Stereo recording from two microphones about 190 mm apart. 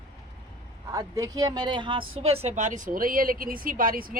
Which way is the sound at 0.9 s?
20° right (ahead or behind).